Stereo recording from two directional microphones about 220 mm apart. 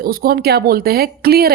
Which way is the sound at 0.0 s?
40° right (ahead or behind).